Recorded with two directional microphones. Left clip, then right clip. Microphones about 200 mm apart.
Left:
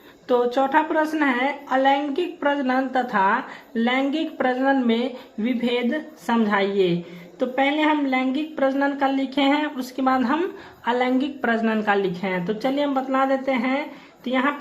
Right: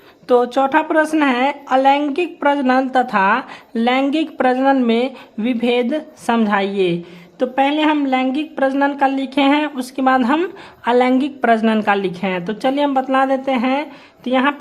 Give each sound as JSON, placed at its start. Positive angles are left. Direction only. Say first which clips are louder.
{"t": 0.3, "sound": "a woman's voice", "louder": "right 5 dB", "side_deg": -40}